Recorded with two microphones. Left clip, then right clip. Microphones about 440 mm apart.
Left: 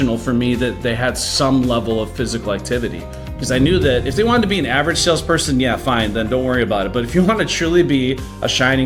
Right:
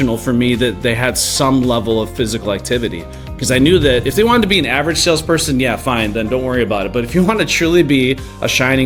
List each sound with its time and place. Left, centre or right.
0.0 s speech: right